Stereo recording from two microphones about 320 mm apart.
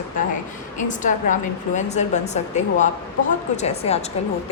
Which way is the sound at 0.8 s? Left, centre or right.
Left.